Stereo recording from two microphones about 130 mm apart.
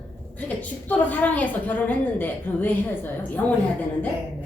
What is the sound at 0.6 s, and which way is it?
A woman's voice, 10° left (ahead or behind).